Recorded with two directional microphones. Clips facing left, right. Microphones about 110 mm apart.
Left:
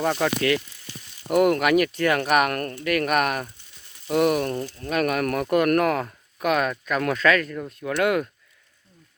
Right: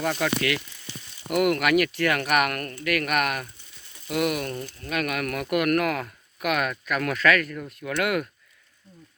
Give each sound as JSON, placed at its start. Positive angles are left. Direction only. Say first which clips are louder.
{"t": 0.0, "sound": "speech", "louder": "left 3 dB", "side_deg": 25}